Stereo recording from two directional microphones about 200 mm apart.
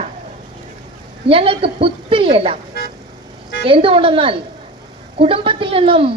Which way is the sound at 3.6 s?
25° right (ahead or behind).